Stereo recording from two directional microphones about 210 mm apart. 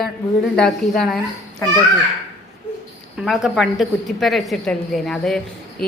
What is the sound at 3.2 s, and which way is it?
A woman's voice, centre (ahead or behind).